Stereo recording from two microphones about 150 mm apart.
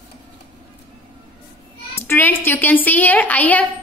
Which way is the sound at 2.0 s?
15° left (ahead or behind).